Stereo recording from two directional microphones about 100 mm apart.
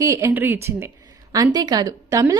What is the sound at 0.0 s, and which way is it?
Speech, 30° right (ahead or behind).